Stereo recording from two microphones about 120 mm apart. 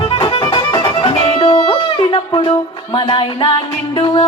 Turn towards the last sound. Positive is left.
turn(degrees=40)  # may be behind; listen again after turning